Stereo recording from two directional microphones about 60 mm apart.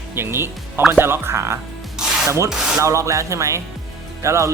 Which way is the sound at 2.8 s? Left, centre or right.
Right.